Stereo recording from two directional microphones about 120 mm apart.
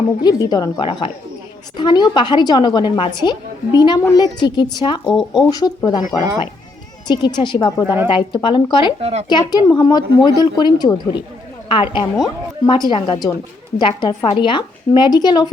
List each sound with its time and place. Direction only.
0.2 s a woman's voice: 35° left (ahead or behind)
0.9 s speech: 50° left (ahead or behind)
1.7 s a woman's voice: 40° left (ahead or behind)
7.1 s a woman's voice: 40° left (ahead or behind)
9.0 s speech: 60° right (ahead or behind)
9.3 s a woman's voice: 35° left (ahead or behind)